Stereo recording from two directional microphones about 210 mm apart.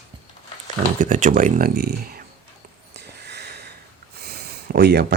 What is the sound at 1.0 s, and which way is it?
Speech, 35° right (ahead or behind).